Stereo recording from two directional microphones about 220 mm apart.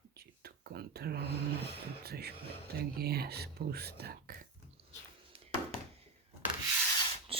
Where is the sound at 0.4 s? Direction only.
45° right (ahead or behind).